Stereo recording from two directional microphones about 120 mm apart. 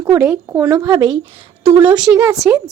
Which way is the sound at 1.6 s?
15° right (ahead or behind).